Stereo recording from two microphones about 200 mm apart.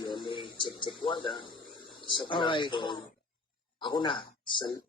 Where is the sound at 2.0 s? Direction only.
25° left (ahead or behind).